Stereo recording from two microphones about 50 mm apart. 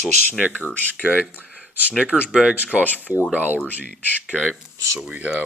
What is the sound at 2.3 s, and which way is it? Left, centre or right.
Speech, centre.